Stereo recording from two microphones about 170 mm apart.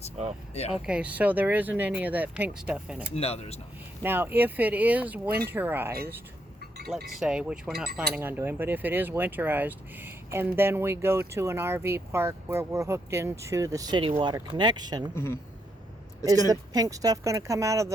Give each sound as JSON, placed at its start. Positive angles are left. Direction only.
{"t": 0.9, "sound": "speech", "side_deg": -5}
{"t": 3.2, "sound": "speech", "side_deg": 35}
{"t": 4.0, "sound": "speech", "side_deg": -10}
{"t": 7.2, "sound": "speech", "side_deg": -5}
{"t": 15.1, "sound": "speech", "side_deg": 15}
{"t": 16.3, "sound": "speech", "side_deg": -20}